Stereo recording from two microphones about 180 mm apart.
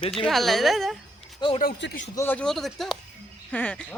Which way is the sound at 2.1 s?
10° left (ahead or behind).